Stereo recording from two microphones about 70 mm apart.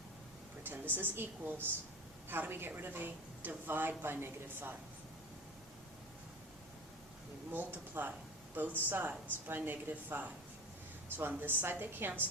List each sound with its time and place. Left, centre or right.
0.6 s a woman's voice: right
7.5 s a woman's voice: right